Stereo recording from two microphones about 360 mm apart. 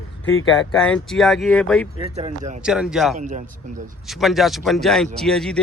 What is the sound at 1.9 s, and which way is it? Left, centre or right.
Speech, centre.